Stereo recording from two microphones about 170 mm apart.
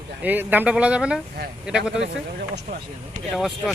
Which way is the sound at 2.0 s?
85° right.